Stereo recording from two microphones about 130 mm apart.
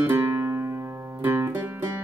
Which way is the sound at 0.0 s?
20° right (ahead or behind).